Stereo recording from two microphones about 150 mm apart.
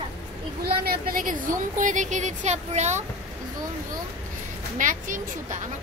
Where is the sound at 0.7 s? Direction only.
85° right; by 3.0 s 50° right (ahead or behind).